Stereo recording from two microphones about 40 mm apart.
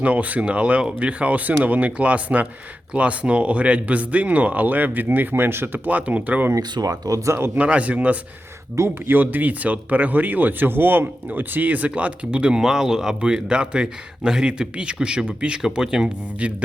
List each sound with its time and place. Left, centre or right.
0.0 s speech: right
5.3 s speech: right
5.9 s speech: right
7.5 s speech: right
9.0 s speech: right
12.5 s speech: centre